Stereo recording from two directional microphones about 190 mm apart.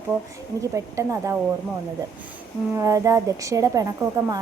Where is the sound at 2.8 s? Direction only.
15° right (ahead or behind).